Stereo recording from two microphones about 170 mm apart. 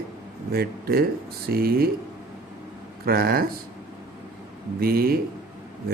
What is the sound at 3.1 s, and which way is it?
Speech, 60° right (ahead or behind).